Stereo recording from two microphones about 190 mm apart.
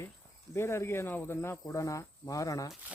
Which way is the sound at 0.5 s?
15° left (ahead or behind).